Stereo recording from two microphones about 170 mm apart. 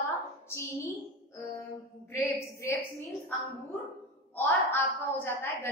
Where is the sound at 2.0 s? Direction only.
15° left (ahead or behind).